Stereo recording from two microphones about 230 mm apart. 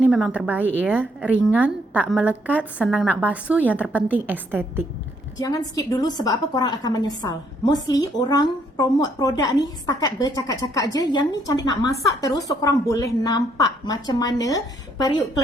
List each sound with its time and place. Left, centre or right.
0.0 s a woman's voice: centre
5.4 s a woman's voice: centre